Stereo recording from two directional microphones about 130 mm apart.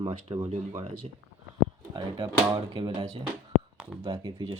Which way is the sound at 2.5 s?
35° right (ahead or behind).